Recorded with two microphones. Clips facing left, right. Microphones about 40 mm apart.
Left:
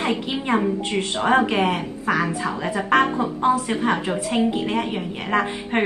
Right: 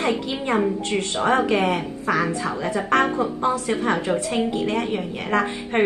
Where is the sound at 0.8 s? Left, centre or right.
Left.